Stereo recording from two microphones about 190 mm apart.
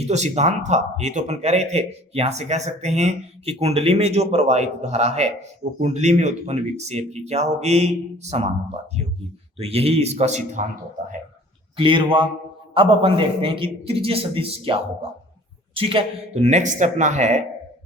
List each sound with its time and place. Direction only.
0.1 s speech: 35° right (ahead or behind)
11.8 s a man's voice: 25° right (ahead or behind)